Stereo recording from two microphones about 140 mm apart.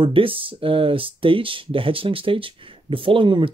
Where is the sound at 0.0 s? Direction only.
40° right (ahead or behind).